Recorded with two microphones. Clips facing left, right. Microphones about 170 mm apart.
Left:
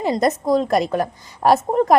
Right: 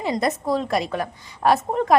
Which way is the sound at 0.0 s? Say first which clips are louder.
Left 4 dB; 45° left (ahead or behind).